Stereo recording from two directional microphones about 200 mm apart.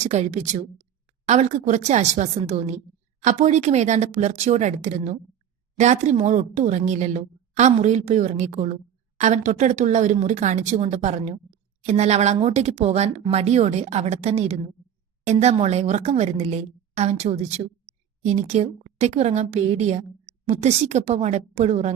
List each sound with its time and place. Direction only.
0.0 s a woman's voice: 35° right (ahead or behind)